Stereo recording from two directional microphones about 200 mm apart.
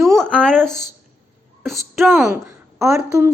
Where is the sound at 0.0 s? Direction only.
Centre (ahead or behind).